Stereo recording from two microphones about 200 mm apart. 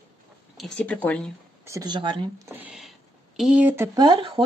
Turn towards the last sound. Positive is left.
turn(degrees=-20)  # may be behind; listen again after turning